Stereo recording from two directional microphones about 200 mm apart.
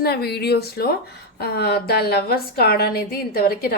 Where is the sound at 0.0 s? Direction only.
50° left (ahead or behind).